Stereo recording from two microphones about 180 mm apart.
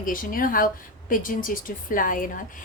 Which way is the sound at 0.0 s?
50° left (ahead or behind).